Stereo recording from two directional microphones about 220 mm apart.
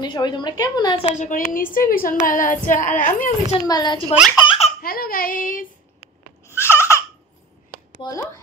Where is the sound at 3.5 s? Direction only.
20° left (ahead or behind).